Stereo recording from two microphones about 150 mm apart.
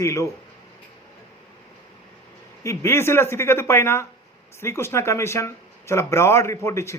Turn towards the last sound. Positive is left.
turn(degrees=20)  # may be behind; listen again after turning